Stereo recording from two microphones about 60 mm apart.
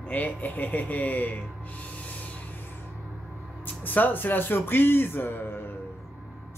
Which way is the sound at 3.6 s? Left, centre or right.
Left.